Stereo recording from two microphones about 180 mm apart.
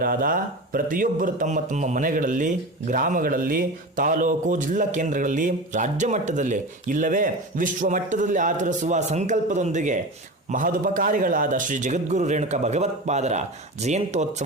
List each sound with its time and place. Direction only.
0.0 s a man's voice: 50° right (ahead or behind)